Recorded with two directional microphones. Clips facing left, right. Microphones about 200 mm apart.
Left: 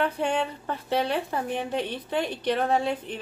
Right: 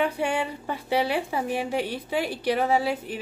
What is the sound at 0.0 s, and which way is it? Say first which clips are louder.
A woman's voice: even; 10° right (ahead or behind).